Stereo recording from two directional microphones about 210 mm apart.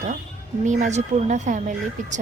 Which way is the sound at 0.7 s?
35° right (ahead or behind).